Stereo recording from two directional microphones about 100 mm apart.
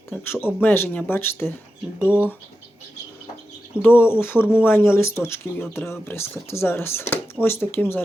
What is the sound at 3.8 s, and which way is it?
Speech, 25° left (ahead or behind).